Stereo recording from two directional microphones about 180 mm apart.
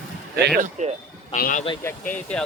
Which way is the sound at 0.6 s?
40° right (ahead or behind).